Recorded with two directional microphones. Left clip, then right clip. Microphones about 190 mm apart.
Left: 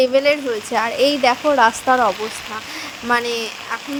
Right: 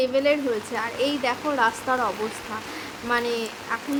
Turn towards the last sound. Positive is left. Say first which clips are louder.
# left 4 dB
turn(degrees=35)  # may be behind; listen again after turning